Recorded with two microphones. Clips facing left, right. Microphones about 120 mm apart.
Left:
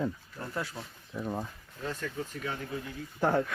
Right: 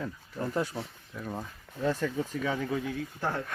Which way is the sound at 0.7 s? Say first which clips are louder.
Right 5 dB; 25° right (ahead or behind).